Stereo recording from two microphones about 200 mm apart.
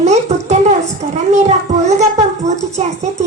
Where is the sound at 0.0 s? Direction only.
35° right (ahead or behind).